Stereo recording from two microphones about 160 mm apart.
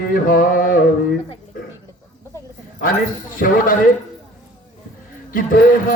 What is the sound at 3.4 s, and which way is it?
Speech, 60° left (ahead or behind).